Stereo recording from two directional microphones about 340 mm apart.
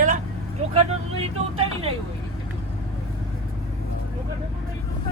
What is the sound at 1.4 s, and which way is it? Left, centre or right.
Speech, centre.